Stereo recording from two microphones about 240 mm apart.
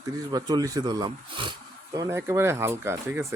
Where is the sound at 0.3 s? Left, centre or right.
Centre.